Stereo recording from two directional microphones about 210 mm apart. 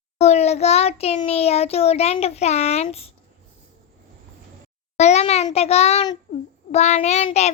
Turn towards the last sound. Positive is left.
turn(degrees=30)  # may be behind; listen again after turning